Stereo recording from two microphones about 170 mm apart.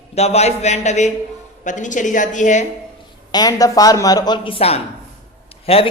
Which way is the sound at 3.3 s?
25° left (ahead or behind).